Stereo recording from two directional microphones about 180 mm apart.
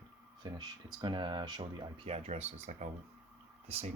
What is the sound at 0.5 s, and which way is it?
Speech, 25° right (ahead or behind).